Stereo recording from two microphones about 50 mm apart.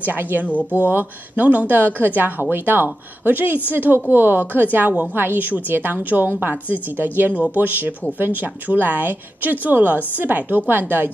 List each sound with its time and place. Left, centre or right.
0.0 s a woman's voice: right
0.5 s speech: left
0.7 s a woman's voice: right